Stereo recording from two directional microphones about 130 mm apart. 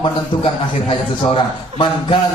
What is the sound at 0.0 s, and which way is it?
A man's voice, 45° left (ahead or behind).